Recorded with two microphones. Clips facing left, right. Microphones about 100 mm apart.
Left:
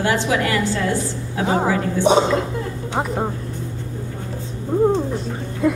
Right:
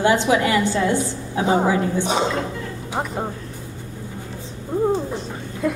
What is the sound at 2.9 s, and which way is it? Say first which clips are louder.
Speech: left 3 dB; centre (ahead or behind).